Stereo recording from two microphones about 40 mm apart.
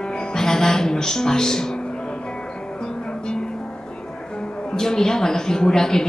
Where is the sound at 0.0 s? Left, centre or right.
Left.